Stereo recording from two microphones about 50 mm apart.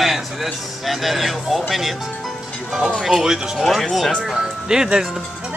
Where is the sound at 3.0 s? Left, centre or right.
Centre.